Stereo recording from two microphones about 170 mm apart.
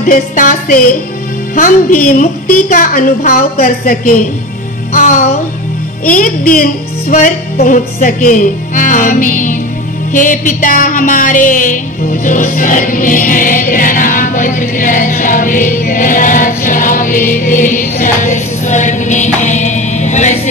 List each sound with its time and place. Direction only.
0.0 s music: 50° left (ahead or behind)
6.0 s music: 50° left (ahead or behind)
10.1 s speech: 50° left (ahead or behind)